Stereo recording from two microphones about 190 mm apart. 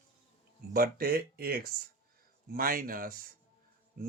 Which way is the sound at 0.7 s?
50° right (ahead or behind).